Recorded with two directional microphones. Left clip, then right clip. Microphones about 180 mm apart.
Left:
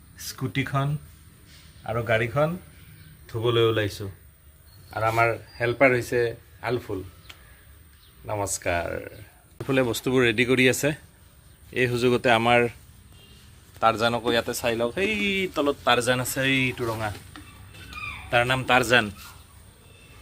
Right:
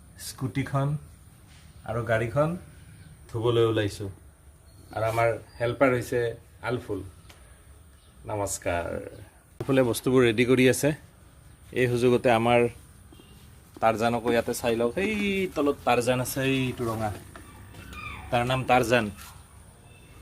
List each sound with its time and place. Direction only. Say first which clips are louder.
0.3 s speech: left 3 dB; 10° left (ahead or behind)
1.9 s speech: left 3 dB; 10° left (ahead or behind)
4.9 s speech: left 2 dB; 20° left (ahead or behind)
8.3 s speech: left 2 dB; 30° left (ahead or behind)
9.6 s speech: even; 5° right (ahead or behind)
13.7 s speech: left 2 dB; 5° right (ahead or behind)
18.3 s speech: left 2 dB; centre (ahead or behind)